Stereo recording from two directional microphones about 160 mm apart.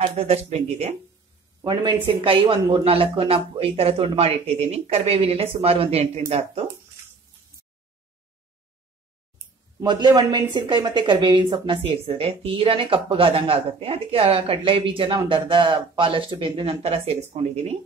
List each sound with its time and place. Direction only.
0.1 s speech: 40° right (ahead or behind)
1.6 s speech: 25° right (ahead or behind); by 6.6 s 40° right (ahead or behind)
9.8 s speech: 25° right (ahead or behind); by 17.7 s 40° right (ahead or behind)